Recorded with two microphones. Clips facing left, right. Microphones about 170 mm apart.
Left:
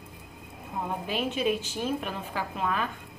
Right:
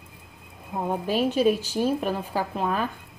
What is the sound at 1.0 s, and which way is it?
A woman's voice, 40° right (ahead or behind).